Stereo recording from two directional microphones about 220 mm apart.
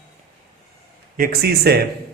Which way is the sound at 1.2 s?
45° right (ahead or behind).